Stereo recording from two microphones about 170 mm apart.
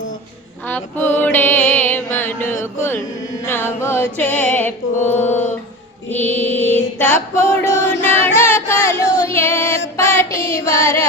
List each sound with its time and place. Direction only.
0.7 s music: 10° left (ahead or behind)
8.4 s a sound: 15° left (ahead or behind)
9.2 s music: 15° left (ahead or behind)
10.0 s child singing: 15° left (ahead or behind)
10.7 s music: 15° left (ahead or behind)